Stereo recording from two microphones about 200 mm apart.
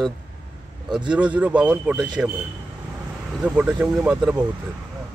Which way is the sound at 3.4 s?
5° right (ahead or behind).